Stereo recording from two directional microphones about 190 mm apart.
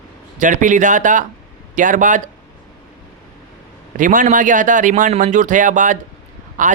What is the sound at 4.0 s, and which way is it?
A man's voice, 45° right (ahead or behind).